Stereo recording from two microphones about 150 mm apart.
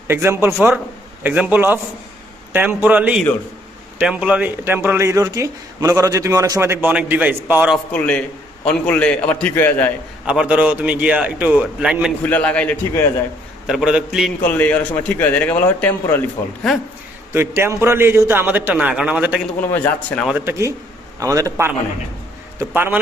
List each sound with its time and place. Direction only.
0.1 s speech: 15° right (ahead or behind)
7.9 s a man's voice: 10° left (ahead or behind)
10.2 s speech: 5° right (ahead or behind)
12.2 s a man's voice: 10° left (ahead or behind)
13.7 s a man's voice: 5° right (ahead or behind)
14.4 s a man's voice: 10° left (ahead or behind)
17.3 s speech: 15° right (ahead or behind)
19.7 s a man's voice: 10° left (ahead or behind)
20.2 s a man's voice: 15° right (ahead or behind)